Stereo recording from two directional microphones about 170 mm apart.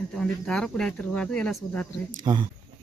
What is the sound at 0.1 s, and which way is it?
Speech, 5° left (ahead or behind).